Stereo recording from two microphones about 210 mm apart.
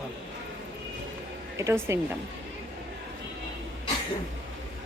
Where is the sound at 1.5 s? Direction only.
15° right (ahead or behind).